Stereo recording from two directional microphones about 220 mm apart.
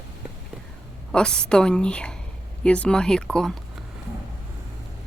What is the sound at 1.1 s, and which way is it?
A woman's voice, 5° left (ahead or behind).